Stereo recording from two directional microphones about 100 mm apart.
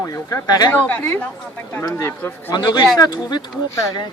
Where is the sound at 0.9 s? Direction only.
20° left (ahead or behind).